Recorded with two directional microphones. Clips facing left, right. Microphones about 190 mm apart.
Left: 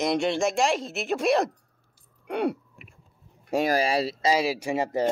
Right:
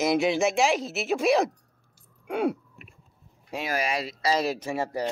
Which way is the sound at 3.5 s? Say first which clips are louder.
Left 6 dB; 40° left (ahead or behind).